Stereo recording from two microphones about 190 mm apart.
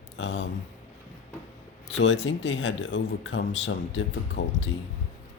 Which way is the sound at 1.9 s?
75° left (ahead or behind).